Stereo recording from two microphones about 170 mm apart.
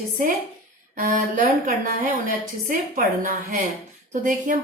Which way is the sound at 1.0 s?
50° right (ahead or behind).